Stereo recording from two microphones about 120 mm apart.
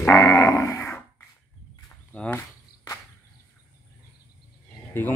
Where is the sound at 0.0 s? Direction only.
25° left (ahead or behind).